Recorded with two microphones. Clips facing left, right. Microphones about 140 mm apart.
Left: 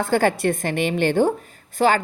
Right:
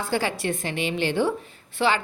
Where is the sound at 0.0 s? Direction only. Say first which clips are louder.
Left 7 dB; 50° left (ahead or behind).